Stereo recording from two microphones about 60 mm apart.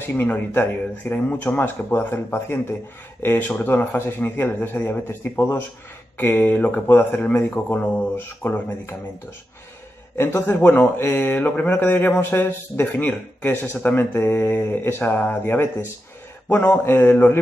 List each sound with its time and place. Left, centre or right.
0.0 s speech: left
1.6 s speech: left
10.1 s a man's voice: left
10.6 s speech: left